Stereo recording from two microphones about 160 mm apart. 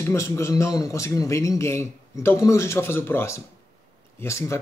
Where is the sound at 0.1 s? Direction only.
15° left (ahead or behind).